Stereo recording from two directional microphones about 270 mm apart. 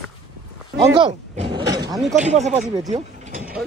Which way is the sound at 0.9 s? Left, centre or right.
Centre.